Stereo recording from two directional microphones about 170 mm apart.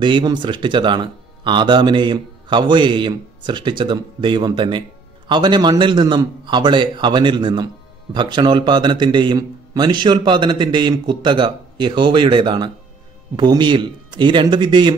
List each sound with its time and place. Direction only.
0.0 s a man's voice: 25° right (ahead or behind)